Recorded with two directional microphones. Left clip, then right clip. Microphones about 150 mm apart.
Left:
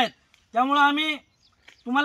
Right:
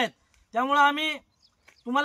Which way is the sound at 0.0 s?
20° right (ahead or behind).